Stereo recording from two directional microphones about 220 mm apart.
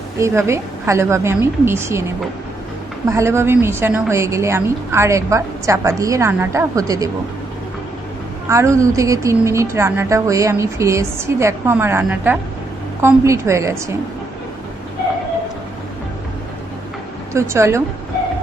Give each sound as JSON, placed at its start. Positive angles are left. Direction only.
{"t": 0.2, "sound": "a woman's voice", "side_deg": -10}
{"t": 3.1, "sound": "a woman's voice", "side_deg": -10}
{"t": 8.4, "sound": "a woman's voice", "side_deg": -15}
{"t": 17.3, "sound": "a woman's voice", "side_deg": -10}